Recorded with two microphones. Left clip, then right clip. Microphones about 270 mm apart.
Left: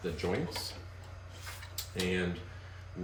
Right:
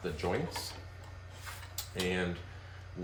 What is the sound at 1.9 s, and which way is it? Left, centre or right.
Speech, centre.